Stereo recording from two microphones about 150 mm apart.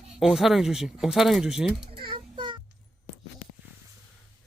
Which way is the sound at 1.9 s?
35° right (ahead or behind).